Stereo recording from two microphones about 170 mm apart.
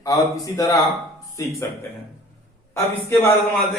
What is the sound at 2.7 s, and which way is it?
Speech, 15° left (ahead or behind).